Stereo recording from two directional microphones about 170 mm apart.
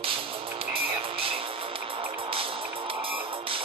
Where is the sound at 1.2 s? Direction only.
30° right (ahead or behind).